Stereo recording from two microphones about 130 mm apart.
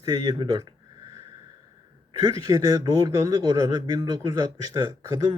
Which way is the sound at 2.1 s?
30° right (ahead or behind).